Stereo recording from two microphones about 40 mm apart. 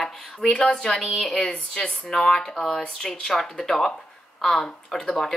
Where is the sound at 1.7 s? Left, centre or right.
Centre.